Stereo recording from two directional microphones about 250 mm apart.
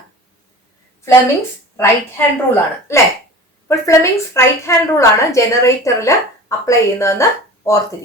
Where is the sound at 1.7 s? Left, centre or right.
Centre.